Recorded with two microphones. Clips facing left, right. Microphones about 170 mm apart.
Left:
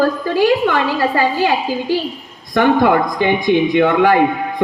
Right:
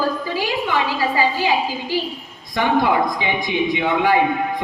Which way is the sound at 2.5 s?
55° left (ahead or behind).